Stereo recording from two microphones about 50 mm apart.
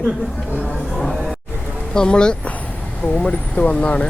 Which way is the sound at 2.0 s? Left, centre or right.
Centre.